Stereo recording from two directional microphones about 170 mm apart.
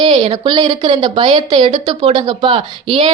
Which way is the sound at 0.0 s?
30° right (ahead or behind).